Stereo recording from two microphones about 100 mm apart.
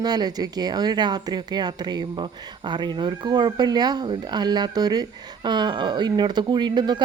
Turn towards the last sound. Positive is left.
turn(degrees=-50)  # may be behind; listen again after turning